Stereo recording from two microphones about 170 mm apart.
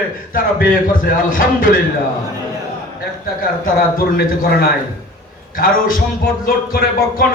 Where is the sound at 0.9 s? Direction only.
55° left (ahead or behind).